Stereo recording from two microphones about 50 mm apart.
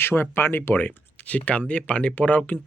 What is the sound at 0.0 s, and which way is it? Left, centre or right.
Speech, left.